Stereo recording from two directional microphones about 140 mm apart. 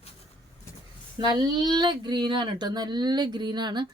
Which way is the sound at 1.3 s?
30° right (ahead or behind).